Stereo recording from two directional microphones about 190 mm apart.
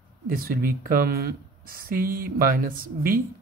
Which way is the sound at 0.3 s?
50° right (ahead or behind).